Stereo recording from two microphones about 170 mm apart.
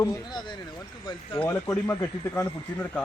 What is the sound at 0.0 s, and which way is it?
Speech, 20° left (ahead or behind).